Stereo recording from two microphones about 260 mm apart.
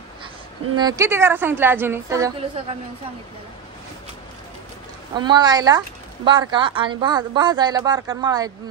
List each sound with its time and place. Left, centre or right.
0.7 s speech: centre
5.1 s speech: centre